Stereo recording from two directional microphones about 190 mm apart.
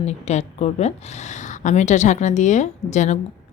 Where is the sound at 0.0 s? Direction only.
35° left (ahead or behind).